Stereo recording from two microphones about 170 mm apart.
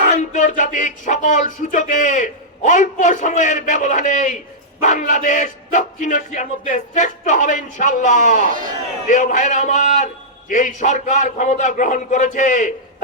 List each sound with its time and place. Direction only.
0.1 s speech: 45° left (ahead or behind)
8.4 s a man's voice: 50° right (ahead or behind)
9.0 s speech: 45° left (ahead or behind)